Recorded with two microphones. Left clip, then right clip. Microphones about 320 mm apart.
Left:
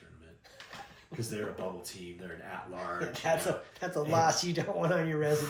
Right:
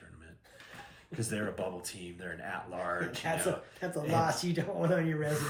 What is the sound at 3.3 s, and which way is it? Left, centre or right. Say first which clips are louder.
Speech: left 4 dB; left.